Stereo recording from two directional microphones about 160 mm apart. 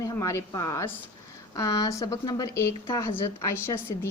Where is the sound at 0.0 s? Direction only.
20° left (ahead or behind).